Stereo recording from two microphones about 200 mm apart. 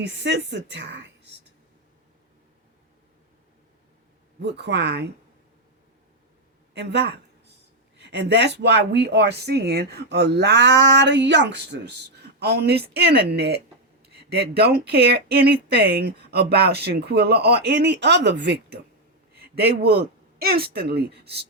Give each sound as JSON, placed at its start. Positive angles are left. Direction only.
{"t": 0.0, "sound": "speech", "side_deg": -60}
{"t": 4.4, "sound": "speech", "side_deg": -60}
{"t": 6.7, "sound": "a sound", "side_deg": -60}
{"t": 7.9, "sound": "speech", "side_deg": -60}